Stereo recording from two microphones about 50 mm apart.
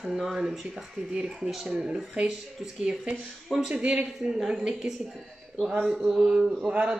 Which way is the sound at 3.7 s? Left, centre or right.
Right.